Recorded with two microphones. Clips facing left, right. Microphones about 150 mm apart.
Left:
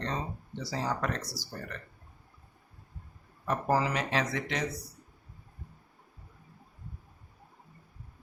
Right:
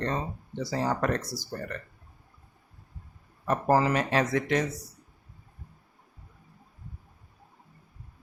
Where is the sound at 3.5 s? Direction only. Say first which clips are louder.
Right 5 dB; 50° right (ahead or behind).